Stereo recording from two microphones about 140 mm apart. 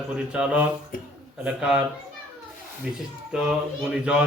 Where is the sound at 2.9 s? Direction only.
5° right (ahead or behind).